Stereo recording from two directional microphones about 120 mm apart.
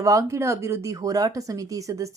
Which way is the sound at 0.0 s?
25° right (ahead or behind).